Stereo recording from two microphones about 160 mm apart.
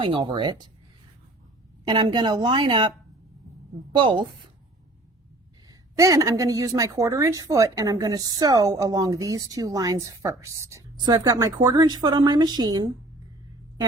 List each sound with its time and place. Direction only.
0.0 s speech: 30° right (ahead or behind)
1.8 s a woman's voice: 30° right (ahead or behind)
3.9 s speech: 30° right (ahead or behind)
5.6 s a woman's voice: 20° right (ahead or behind)